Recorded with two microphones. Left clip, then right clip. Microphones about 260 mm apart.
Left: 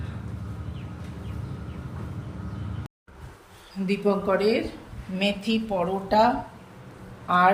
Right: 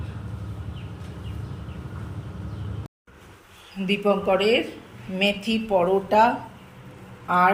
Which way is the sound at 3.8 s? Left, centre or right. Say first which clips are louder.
Right 3 dB; centre.